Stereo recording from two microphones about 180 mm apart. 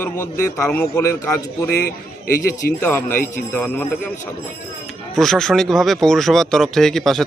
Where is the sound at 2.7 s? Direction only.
10° left (ahead or behind).